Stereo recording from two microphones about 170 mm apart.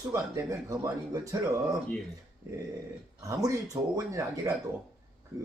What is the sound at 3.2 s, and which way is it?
Speech, 20° right (ahead or behind).